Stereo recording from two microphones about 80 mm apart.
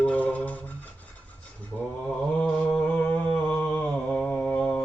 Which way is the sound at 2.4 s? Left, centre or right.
Centre.